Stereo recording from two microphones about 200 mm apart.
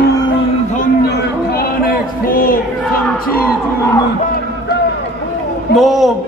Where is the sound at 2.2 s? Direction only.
45° left (ahead or behind).